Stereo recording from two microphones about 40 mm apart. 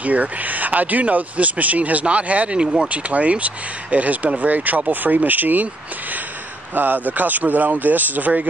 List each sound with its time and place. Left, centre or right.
0.0 s speech: right
2.9 s speech: right
6.7 s speech: right